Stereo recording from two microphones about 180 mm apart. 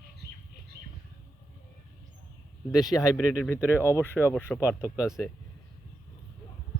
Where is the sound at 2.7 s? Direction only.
Centre (ahead or behind).